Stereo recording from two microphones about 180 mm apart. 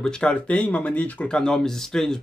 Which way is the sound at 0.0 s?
5° left (ahead or behind).